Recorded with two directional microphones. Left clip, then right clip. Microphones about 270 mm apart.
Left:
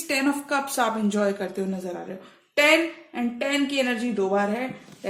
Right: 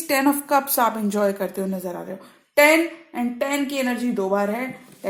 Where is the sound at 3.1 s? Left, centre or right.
Right.